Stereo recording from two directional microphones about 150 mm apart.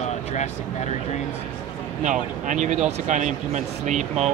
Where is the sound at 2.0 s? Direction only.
55° right (ahead or behind).